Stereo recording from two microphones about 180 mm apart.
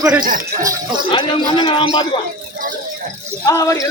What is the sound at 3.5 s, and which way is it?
Speech, 15° left (ahead or behind).